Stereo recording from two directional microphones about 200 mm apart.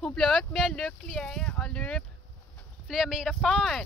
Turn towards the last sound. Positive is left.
turn(degrees=0)  # may be behind; listen again after turning